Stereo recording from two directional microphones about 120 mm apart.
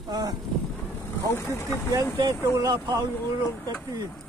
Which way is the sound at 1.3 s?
20° left (ahead or behind).